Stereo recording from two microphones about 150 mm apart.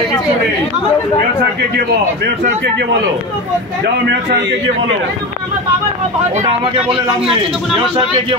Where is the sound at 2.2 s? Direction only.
90° right.